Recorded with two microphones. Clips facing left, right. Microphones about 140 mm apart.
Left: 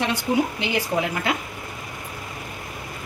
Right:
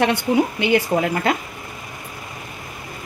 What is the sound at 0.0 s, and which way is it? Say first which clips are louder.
Speech: right 4 dB; 60° right (ahead or behind).